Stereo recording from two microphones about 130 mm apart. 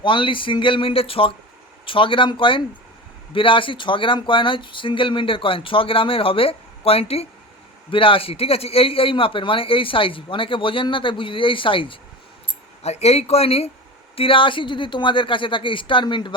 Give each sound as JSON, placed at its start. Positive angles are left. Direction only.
{"t": 0.0, "sound": "a man's voice", "side_deg": 40}
{"t": 12.8, "sound": "a man's voice", "side_deg": 55}